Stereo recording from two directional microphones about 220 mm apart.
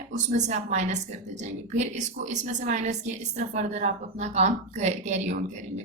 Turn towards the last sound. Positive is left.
turn(degrees=-30)  # may be behind; listen again after turning